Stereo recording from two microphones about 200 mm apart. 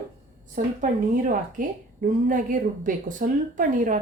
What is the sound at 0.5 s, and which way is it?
Speech, 40° right (ahead or behind).